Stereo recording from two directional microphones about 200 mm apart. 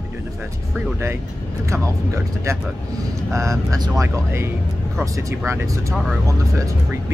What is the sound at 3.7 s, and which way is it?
Speech, 15° right (ahead or behind).